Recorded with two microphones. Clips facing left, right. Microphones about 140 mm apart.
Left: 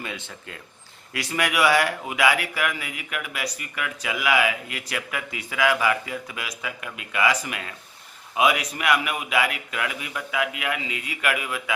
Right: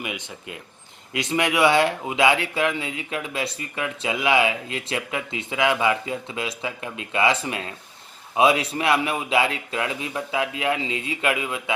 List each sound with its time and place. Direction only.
0.0 s speech: 15° right (ahead or behind)